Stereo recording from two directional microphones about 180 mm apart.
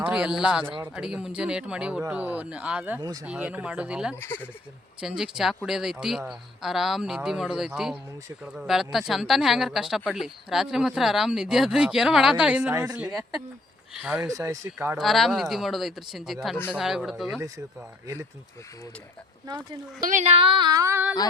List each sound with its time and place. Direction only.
0.0 s speech: 5° right (ahead or behind)
4.1 s speech: 10° left (ahead or behind)
4.9 s speech: centre (ahead or behind)
14.3 s speech: 20° right (ahead or behind)
14.9 s speech: centre (ahead or behind)
20.0 s a sound: 45° right (ahead or behind); by 21.2 s 10° right (ahead or behind)